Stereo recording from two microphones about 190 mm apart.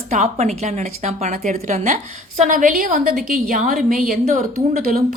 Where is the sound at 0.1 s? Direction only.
40° right (ahead or behind).